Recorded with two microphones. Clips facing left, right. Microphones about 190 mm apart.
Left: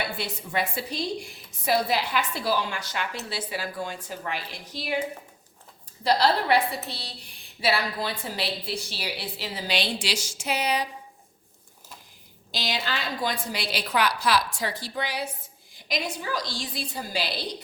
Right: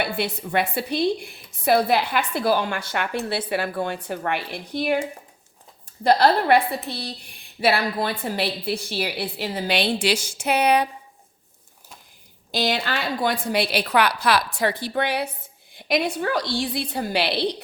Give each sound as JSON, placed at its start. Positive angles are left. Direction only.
{"t": 0.0, "sound": "a woman's voice", "side_deg": -60}
{"t": 12.5, "sound": "a woman's voice", "side_deg": -55}